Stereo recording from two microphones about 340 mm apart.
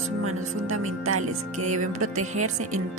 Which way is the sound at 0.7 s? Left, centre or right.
Right.